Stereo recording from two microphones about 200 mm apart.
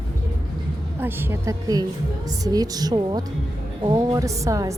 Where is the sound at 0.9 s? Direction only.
10° right (ahead or behind).